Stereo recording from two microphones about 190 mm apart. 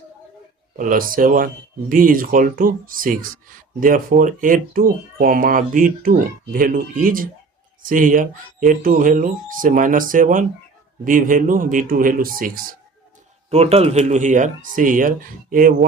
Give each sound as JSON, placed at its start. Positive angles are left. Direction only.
{"t": 0.8, "sound": "speech", "side_deg": -45}
{"t": 13.5, "sound": "speech", "side_deg": -35}